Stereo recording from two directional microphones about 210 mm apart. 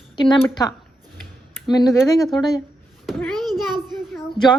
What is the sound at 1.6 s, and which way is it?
Speech, 20° left (ahead or behind).